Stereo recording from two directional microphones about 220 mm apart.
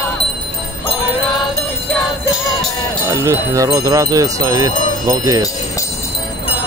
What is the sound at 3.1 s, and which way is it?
Jingle bell, 15° right (ahead or behind).